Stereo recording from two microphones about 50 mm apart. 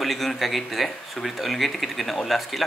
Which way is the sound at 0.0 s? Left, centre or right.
Centre.